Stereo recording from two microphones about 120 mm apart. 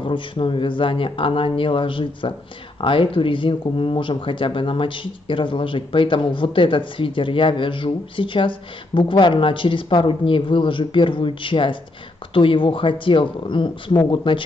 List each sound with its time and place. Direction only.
0.0 s speech: 45° left (ahead or behind)